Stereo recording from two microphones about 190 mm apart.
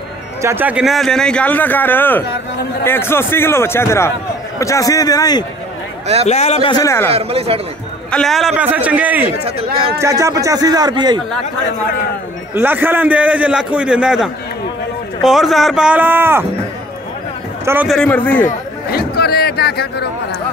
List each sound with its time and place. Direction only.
0.4 s a man's voice: 10° right (ahead or behind); by 5.4 s 20° left (ahead or behind)
6.2 s a man's voice: 35° left (ahead or behind); by 7.1 s 15° left (ahead or behind)
7.1 s speech: 30° right (ahead or behind)
8.1 s a man's voice: centre (ahead or behind); by 11.1 s 20° right (ahead or behind)
12.5 s a man's voice: 10° right (ahead or behind)
17.8 s a man's voice: 5° left (ahead or behind)
18.4 s a sound: 55° left (ahead or behind)